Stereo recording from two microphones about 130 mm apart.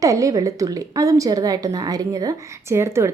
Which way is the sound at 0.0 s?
25° right (ahead or behind).